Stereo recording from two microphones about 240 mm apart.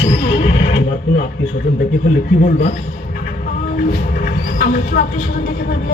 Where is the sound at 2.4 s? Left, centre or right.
Left.